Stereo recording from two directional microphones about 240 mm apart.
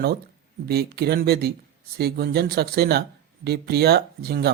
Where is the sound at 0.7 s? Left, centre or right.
Right.